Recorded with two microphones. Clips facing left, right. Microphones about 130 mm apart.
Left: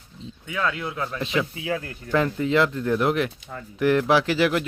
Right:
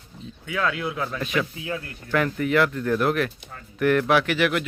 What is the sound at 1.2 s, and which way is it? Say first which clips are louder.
Speech: left 3 dB; 25° left (ahead or behind).